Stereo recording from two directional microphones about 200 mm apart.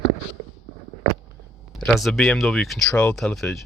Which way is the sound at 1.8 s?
Centre (ahead or behind).